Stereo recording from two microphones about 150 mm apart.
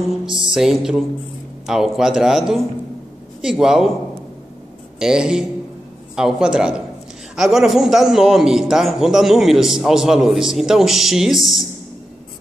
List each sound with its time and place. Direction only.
0.3 s music: 35° right (ahead or behind)
0.6 s a man's voice: 5° right (ahead or behind)
4.9 s a man's voice: 5° right (ahead or behind)